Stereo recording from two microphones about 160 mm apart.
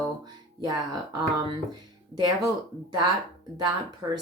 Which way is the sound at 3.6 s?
25° right (ahead or behind).